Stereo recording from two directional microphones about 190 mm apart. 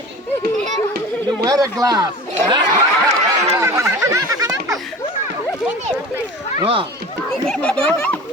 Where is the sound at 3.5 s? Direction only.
15° right (ahead or behind).